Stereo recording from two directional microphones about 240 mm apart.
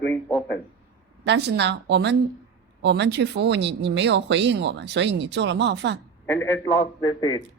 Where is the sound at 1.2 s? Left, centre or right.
Right.